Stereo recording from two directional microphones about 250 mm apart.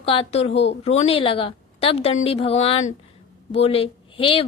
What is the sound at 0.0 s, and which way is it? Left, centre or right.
A woman's voice, left.